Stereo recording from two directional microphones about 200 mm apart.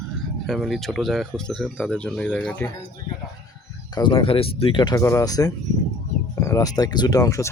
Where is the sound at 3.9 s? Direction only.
25° left (ahead or behind).